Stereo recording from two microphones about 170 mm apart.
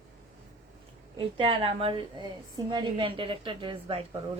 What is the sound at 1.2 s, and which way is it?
A woman's voice, 30° right (ahead or behind).